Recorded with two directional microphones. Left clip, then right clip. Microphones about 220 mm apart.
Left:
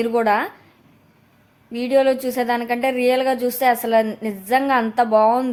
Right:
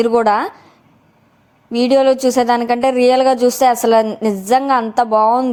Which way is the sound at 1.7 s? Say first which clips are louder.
Right 5 dB; 25° right (ahead or behind).